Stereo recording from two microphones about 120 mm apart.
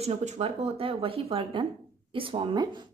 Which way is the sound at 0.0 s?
60° right (ahead or behind).